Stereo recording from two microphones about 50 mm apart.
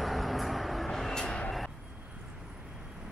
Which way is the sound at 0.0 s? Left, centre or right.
Centre.